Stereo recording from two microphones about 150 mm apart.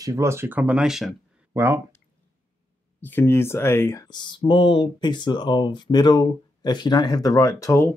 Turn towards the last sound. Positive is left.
turn(degrees=20)  # may be behind; listen again after turning